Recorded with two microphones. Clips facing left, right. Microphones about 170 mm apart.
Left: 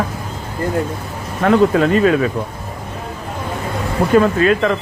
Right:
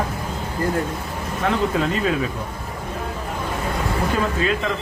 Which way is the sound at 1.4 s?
60° left (ahead or behind).